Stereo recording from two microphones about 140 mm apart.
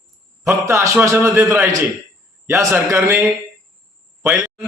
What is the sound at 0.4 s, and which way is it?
A man's voice, 20° right (ahead or behind).